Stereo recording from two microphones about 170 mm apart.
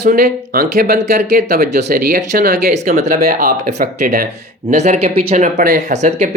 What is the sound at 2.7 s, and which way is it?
Speech, 40° right (ahead or behind).